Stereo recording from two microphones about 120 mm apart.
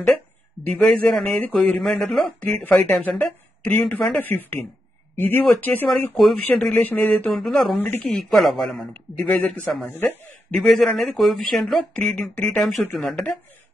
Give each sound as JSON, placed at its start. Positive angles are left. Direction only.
{"t": 0.7, "sound": "speech", "side_deg": 5}
{"t": 1.3, "sound": "speech", "side_deg": 15}
{"t": 1.8, "sound": "speech", "side_deg": 5}
{"t": 2.0, "sound": "speech", "side_deg": 15}
{"t": 7.7, "sound": "speech", "side_deg": 15}
{"t": 8.1, "sound": "speech", "side_deg": 0}
{"t": 9.8, "sound": "speech", "side_deg": 20}
{"t": 10.5, "sound": "speech", "side_deg": 5}